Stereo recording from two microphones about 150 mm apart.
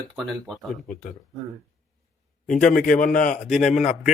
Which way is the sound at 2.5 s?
60° left (ahead or behind).